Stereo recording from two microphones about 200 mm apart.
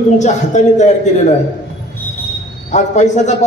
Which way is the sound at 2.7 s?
35° left (ahead or behind).